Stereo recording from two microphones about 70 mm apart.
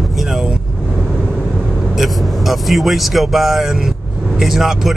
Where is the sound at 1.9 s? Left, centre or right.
Centre.